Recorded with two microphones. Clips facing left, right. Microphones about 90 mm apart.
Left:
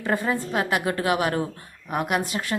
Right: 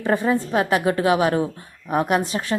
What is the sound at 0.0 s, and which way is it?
A woman's voice, 25° right (ahead or behind).